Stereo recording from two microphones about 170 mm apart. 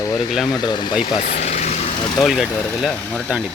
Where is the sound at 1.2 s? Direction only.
45° left (ahead or behind).